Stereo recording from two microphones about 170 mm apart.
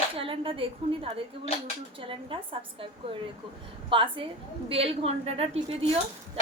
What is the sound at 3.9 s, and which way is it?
A woman's voice, 30° right (ahead or behind).